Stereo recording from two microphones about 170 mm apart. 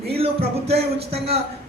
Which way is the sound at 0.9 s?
35° right (ahead or behind).